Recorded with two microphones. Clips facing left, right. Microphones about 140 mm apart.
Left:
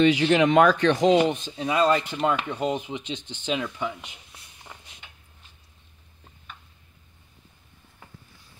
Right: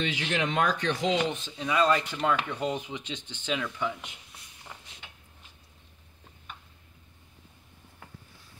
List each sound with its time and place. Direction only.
0.1 s speech: 80° left
1.1 s speech: 35° left (ahead or behind); by 4.1 s 20° left (ahead or behind)